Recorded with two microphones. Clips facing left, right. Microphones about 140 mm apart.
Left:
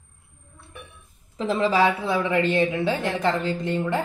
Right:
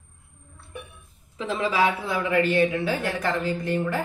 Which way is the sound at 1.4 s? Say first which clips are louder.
Left 3 dB; 35° left (ahead or behind).